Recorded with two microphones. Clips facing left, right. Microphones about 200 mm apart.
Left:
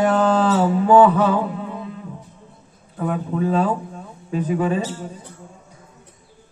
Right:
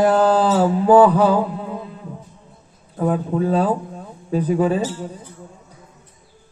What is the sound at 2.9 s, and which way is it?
A man's voice, 35° right (ahead or behind).